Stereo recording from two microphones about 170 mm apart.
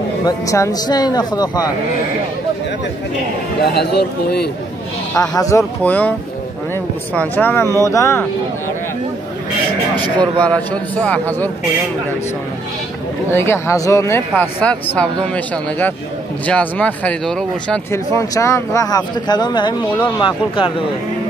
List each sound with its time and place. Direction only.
0.2 s speech: 20° left (ahead or behind)
3.6 s a man's voice: 70° left (ahead or behind)
5.1 s speech: 20° left (ahead or behind)
7.2 s speech: 10° left (ahead or behind)
10.4 s speech: 5° left (ahead or behind)
13.3 s speech: 15° left (ahead or behind)
17.9 s speech: 20° left (ahead or behind)